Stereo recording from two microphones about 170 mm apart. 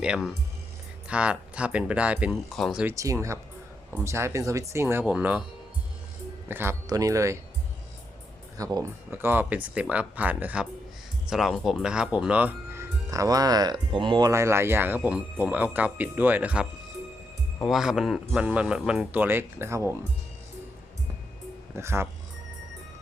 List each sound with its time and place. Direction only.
0.0 s speech: 5° right (ahead or behind)
2.8 s speech: 20° right (ahead or behind)
6.5 s speech: 15° right (ahead or behind)
8.5 s speech: 20° right (ahead or behind)
21.8 s speech: 15° right (ahead or behind)